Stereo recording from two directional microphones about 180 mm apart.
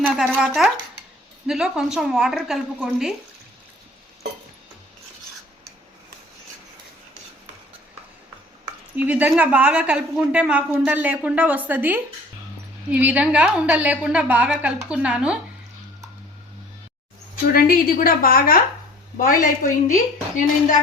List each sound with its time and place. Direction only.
0.0 s a woman's voice: 5° right (ahead or behind)
9.0 s a woman's voice: 10° right (ahead or behind)
17.5 s a woman's voice: 55° left (ahead or behind)